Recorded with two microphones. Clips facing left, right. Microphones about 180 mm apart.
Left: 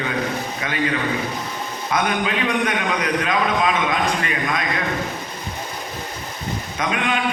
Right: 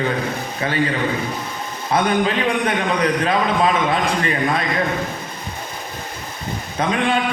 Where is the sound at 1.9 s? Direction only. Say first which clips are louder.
Right 4 dB; 30° right (ahead or behind).